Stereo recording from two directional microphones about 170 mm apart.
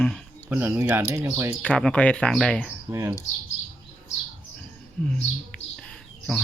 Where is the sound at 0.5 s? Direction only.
15° right (ahead or behind).